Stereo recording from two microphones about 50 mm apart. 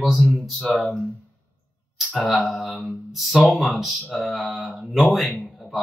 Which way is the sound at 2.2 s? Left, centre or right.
Centre.